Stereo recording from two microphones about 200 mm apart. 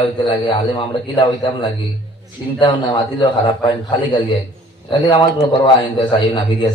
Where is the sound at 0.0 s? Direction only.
25° left (ahead or behind).